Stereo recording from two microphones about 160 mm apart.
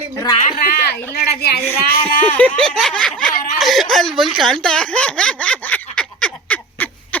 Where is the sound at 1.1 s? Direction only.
85° left.